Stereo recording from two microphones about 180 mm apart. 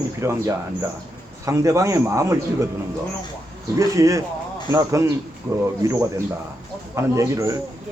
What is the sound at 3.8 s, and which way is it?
A man's voice, 20° right (ahead or behind).